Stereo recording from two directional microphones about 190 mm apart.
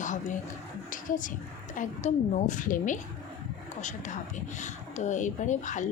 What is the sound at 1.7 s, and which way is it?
Speech, 40° left (ahead or behind).